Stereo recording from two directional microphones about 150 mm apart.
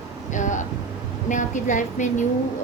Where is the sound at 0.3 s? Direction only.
55° left (ahead or behind).